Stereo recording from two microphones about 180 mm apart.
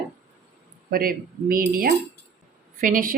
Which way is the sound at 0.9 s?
55° right (ahead or behind).